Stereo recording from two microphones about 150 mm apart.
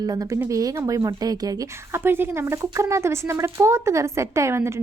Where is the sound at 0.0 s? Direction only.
25° right (ahead or behind).